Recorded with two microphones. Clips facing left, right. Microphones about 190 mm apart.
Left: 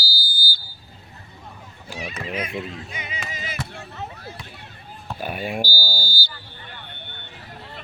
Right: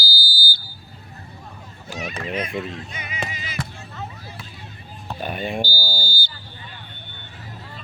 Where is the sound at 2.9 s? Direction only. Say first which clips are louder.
Even; 20° left (ahead or behind).